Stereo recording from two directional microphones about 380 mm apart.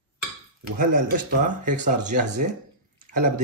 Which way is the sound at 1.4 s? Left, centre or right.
Centre.